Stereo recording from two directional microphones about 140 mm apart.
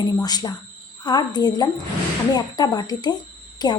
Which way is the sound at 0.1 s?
30° left (ahead or behind).